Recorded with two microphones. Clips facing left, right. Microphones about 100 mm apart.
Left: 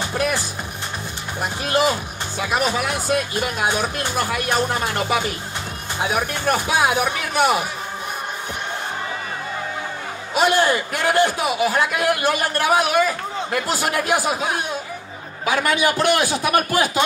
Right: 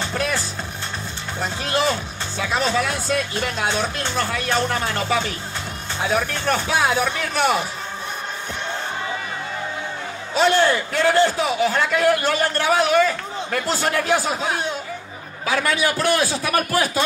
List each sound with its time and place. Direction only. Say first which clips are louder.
0.0 s music: left 2 dB; 10° left (ahead or behind)
1.4 s a man's voice: left 2 dB; 15° left (ahead or behind)
10.3 s a man's voice: even; 10° left (ahead or behind)